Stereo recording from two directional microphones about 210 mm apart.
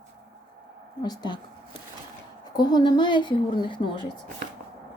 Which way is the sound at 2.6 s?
20° left (ahead or behind).